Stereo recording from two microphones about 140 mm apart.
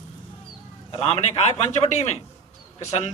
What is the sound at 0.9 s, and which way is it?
A man's voice, 45° left (ahead or behind).